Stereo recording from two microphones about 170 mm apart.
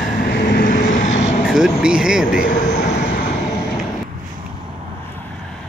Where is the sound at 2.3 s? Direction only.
50° left (ahead or behind).